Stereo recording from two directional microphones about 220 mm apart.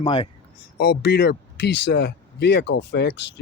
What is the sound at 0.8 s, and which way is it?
Speech, 45° left (ahead or behind).